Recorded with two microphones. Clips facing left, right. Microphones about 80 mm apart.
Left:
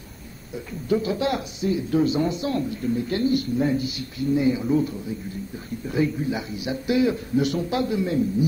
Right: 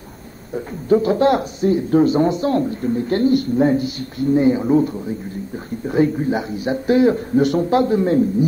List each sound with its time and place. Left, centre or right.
0.8 s speech: right